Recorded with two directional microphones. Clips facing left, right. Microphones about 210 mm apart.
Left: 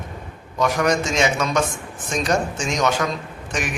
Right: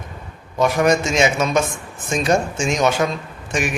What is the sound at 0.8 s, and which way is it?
Speech, 10° right (ahead or behind).